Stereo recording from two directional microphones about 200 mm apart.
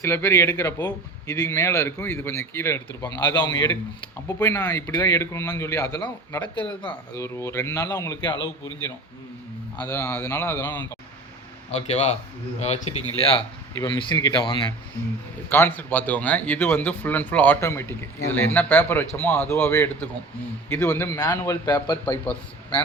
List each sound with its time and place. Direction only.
0.0 s speech: 10° left (ahead or behind)
9.7 s speech: 10° left (ahead or behind)
11.7 s speech: 30° left (ahead or behind)
13.8 s speech: 20° left (ahead or behind)
15.4 s speech: 10° left (ahead or behind)